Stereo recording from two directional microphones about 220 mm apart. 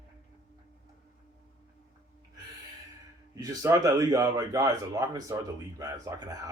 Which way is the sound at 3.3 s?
15° right (ahead or behind).